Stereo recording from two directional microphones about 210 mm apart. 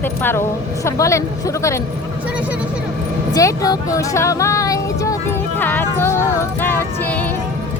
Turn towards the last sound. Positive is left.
turn(degrees=10)  # may be behind; listen again after turning